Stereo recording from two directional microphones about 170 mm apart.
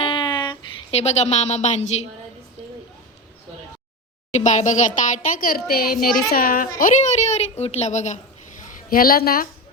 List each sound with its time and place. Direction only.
0.0 s a sound: 30° left (ahead or behind)
4.3 s a child's voice: 45° left (ahead or behind)
8.9 s speech: 60° left (ahead or behind)